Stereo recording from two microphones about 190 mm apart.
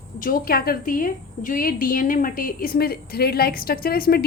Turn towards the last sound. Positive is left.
turn(degrees=50)  # may be behind; listen again after turning